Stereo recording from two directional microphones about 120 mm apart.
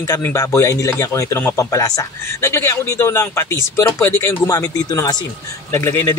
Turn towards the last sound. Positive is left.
turn(degrees=20)  # may be behind; listen again after turning